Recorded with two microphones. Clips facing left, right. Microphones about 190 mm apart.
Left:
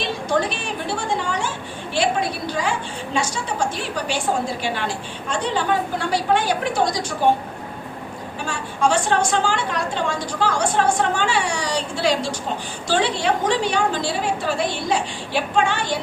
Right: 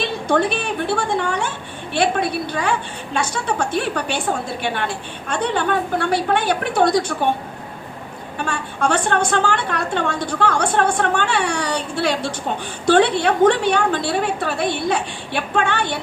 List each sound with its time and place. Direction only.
0.0 s a woman's voice: 60° right (ahead or behind)
8.4 s a woman's voice: 60° right (ahead or behind)